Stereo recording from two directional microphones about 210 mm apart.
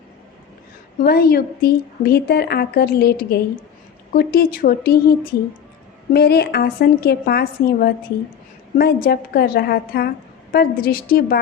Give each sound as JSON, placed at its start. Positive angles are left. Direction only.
{"t": 1.0, "sound": "a woman's voice", "side_deg": 45}